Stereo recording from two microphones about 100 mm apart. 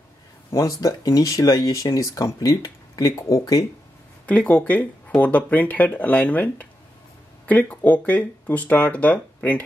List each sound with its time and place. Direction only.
0.5 s speech: 35° left (ahead or behind)
4.3 s speech: 15° left (ahead or behind)